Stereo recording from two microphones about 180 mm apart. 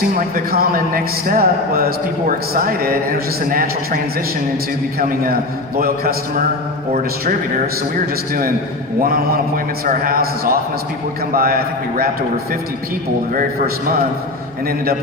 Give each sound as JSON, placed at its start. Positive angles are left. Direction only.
{"t": 0.3, "sound": "a man's voice", "side_deg": -55}
{"t": 9.0, "sound": "a man's voice", "side_deg": -55}